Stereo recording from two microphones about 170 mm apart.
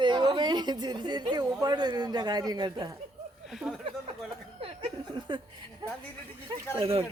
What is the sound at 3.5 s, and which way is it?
Speech, centre (ahead or behind).